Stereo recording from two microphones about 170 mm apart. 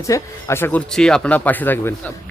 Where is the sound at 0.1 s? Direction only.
15° left (ahead or behind).